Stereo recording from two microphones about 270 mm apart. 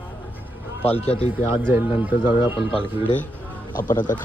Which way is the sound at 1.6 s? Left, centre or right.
Centre.